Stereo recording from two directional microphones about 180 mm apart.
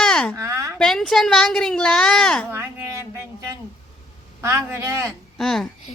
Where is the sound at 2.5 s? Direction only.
10° right (ahead or behind).